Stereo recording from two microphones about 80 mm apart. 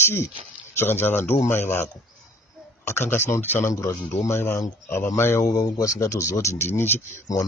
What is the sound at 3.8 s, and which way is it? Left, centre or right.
Speech, left.